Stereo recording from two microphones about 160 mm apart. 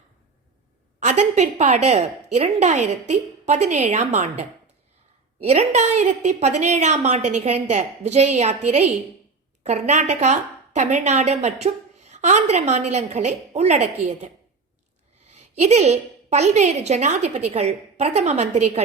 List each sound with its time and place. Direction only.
0.9 s a woman's voice: 45° right (ahead or behind)
15.3 s a woman's voice: 45° right (ahead or behind)